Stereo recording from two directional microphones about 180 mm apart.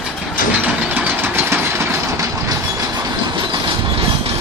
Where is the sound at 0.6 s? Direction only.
10° right (ahead or behind).